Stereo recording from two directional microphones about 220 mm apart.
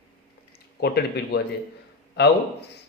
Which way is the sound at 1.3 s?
45° left (ahead or behind).